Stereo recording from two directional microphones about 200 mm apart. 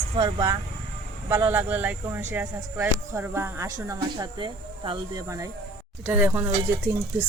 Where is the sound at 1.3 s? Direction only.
10° right (ahead or behind).